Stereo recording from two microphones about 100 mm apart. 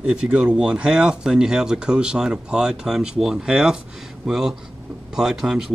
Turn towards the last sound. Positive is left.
turn(degrees=-5)  # may be behind; listen again after turning